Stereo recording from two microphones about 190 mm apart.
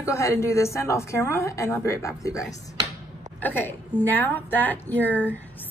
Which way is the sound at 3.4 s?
10° left (ahead or behind).